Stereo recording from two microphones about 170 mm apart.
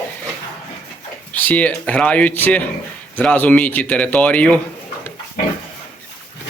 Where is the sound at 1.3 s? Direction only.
10° left (ahead or behind).